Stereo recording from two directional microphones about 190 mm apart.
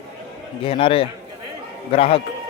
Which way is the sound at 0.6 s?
30° left (ahead or behind).